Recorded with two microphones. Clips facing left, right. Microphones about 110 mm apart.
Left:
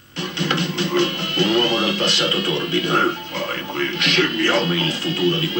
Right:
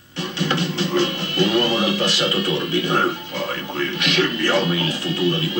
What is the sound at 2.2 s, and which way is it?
A man's voice, 15° right (ahead or behind).